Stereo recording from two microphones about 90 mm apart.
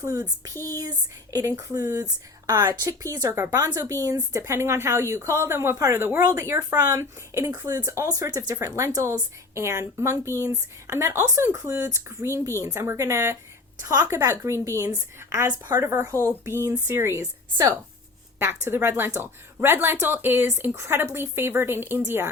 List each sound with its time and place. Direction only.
0.0 s speech: 40° right (ahead or behind)
7.5 s speech: 40° right (ahead or behind)
17.2 s a woman's voice: 40° right (ahead or behind)
18.3 s speech: 25° right (ahead or behind)